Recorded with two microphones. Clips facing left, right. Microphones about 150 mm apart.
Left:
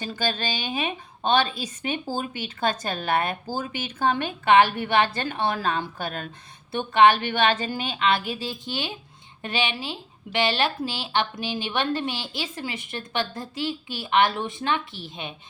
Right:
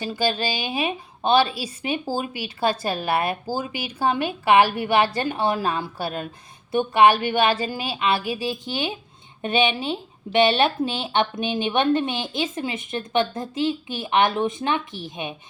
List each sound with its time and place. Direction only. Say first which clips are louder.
0.0 s a woman's voice: right 4 dB; 10° right (ahead or behind)